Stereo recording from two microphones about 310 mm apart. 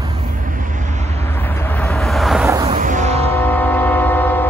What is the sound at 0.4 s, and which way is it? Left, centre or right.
Vehicle, right.